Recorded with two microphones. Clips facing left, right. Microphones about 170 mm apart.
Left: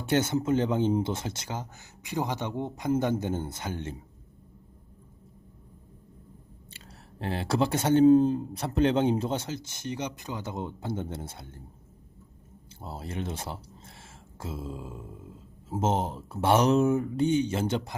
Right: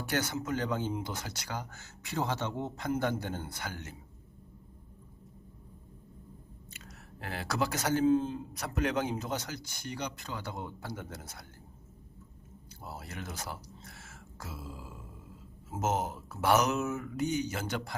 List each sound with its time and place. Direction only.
0.0 s a man's voice: 25° left (ahead or behind)
6.7 s speech: 30° left (ahead or behind)
8.0 s a man's voice: 40° left (ahead or behind)
12.8 s a man's voice: 25° left (ahead or behind)